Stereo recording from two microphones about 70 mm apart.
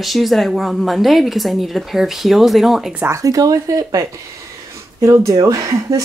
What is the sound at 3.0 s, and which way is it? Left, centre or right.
Speech, right.